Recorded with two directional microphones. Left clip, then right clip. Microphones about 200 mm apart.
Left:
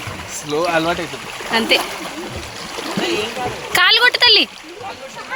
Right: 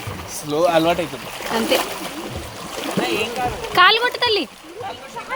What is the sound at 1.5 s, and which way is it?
Speech, centre (ahead or behind).